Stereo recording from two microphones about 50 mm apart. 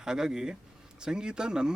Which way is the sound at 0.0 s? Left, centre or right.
Centre.